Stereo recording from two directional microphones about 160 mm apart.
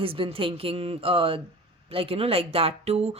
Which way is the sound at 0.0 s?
35° right (ahead or behind).